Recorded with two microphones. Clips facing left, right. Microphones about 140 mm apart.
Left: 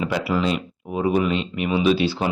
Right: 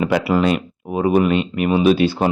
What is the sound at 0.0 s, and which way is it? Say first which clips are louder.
Speech: right 5 dB; 60° right (ahead or behind).